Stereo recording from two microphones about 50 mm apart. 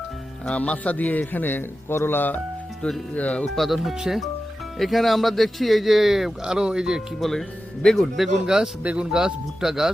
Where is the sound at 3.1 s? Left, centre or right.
Left.